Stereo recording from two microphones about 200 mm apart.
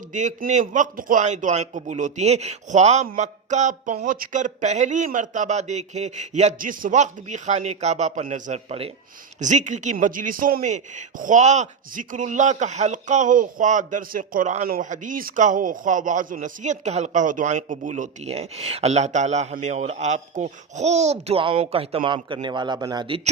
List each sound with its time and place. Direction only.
0.1 s a man's voice: 40° right (ahead or behind)